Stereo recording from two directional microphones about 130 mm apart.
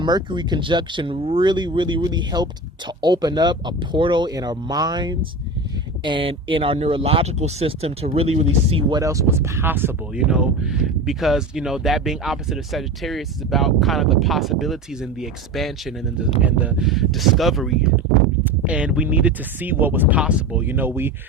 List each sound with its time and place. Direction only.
0.0 s speech: 35° right (ahead or behind); by 8.8 s 50° right (ahead or behind)
8.9 s speech: 25° right (ahead or behind)
10.2 s speech: 5° right (ahead or behind)
16.4 s speech: 10° right (ahead or behind)